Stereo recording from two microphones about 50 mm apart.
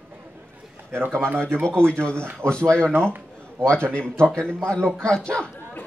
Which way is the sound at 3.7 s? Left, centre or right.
Centre.